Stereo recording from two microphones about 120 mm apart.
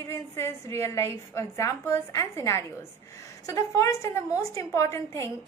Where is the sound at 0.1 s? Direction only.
25° left (ahead or behind).